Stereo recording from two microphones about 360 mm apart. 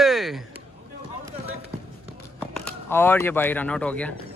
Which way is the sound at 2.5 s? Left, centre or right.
Centre.